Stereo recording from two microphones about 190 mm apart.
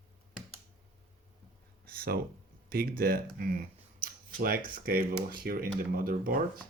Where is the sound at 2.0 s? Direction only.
55° right (ahead or behind).